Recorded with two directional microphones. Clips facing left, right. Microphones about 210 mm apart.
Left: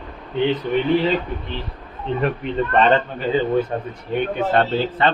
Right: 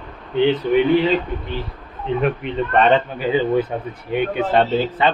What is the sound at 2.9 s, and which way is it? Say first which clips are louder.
Speech: right 1 dB; 5° right (ahead or behind).